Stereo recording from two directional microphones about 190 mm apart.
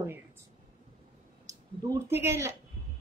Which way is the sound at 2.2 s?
15° right (ahead or behind).